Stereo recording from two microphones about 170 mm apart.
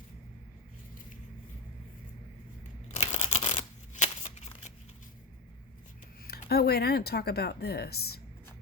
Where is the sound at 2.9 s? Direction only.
40° left (ahead or behind).